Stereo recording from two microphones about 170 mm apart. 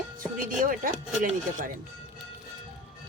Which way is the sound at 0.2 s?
55° right (ahead or behind).